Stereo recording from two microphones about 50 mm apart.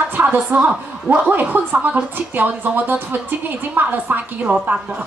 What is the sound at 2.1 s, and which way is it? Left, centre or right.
A woman's voice, right.